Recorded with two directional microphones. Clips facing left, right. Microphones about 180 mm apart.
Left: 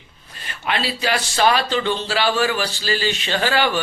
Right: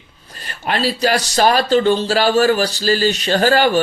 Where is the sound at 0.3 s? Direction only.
40° right (ahead or behind).